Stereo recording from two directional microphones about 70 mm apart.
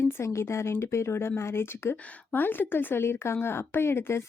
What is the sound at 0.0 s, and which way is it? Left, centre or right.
Speech, left.